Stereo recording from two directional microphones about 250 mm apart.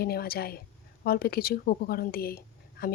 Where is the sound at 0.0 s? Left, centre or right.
Left.